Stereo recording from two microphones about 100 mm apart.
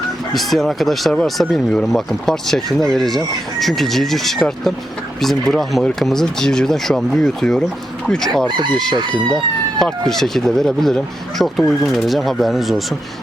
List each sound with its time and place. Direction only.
0.3 s speech: centre (ahead or behind)
8.0 s chicken: 5° left (ahead or behind)
8.4 s chicken: 50° right (ahead or behind)
8.7 s speech: 5° left (ahead or behind)
10.1 s speech: 5° left (ahead or behind)